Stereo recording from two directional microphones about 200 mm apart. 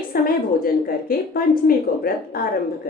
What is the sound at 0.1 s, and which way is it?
A woman's voice, 45° left (ahead or behind).